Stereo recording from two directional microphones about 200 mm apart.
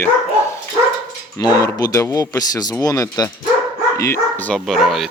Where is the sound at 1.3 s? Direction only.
20° left (ahead or behind).